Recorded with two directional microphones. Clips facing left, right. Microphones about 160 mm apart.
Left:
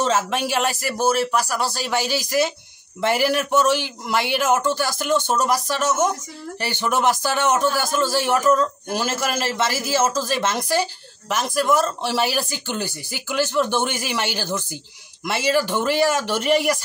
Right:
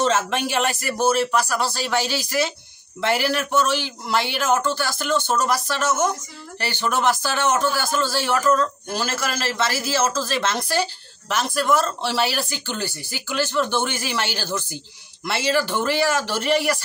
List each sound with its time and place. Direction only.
0.0 s a man's voice: 10° left (ahead or behind)